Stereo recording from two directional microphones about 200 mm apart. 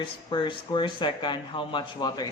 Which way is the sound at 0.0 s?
20° left (ahead or behind).